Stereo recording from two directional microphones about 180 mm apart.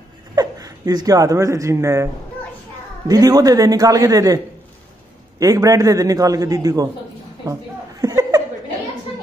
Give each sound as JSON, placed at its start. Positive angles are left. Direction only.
{"t": 0.4, "sound": "speech", "side_deg": -20}
{"t": 3.1, "sound": "a man's voice", "side_deg": -20}
{"t": 5.4, "sound": "a man's voice", "side_deg": -20}
{"t": 8.0, "sound": "laughter", "side_deg": -20}